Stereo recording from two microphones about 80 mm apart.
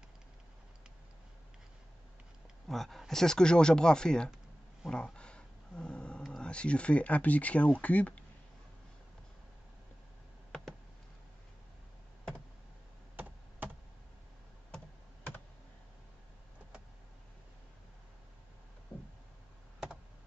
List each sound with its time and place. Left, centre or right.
2.7 s speech: centre
4.8 s a sound: centre
6.2 s speech: centre